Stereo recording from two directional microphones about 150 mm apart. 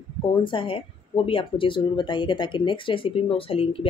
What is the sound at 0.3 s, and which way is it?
Speech, 35° left (ahead or behind).